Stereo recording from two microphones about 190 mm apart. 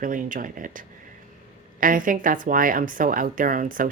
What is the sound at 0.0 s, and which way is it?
Speech, 45° right (ahead or behind).